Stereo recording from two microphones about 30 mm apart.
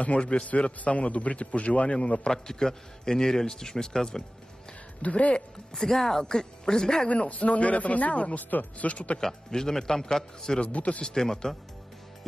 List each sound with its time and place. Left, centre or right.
0.0 s a man's voice: left
2.3 s a man's voice: centre
5.0 s a man's voice: left
5.8 s a woman's voice: centre
6.2 s a man's voice: left
7.1 s a man's voice: left
8.4 s speech: left
8.8 s a man's voice: left
9.2 s a man's voice: centre
10.7 s a man's voice: left
11.1 s a woman's voice: centre